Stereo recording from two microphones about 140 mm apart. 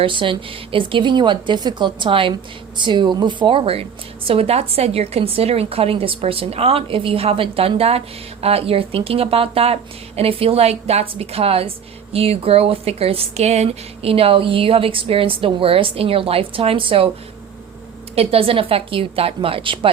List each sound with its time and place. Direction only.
0.0 s a woman's voice: 35° right (ahead or behind)
18.1 s a woman's voice: 45° right (ahead or behind)